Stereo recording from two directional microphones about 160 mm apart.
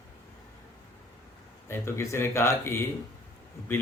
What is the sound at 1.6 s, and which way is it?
Speech, 15° left (ahead or behind).